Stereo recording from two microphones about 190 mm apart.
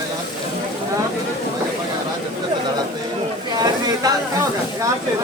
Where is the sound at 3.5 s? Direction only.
20° right (ahead or behind).